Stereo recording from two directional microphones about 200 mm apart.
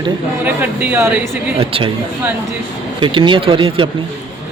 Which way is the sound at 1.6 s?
25° right (ahead or behind).